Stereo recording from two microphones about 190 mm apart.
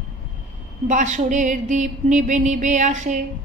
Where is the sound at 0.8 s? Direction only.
40° right (ahead or behind).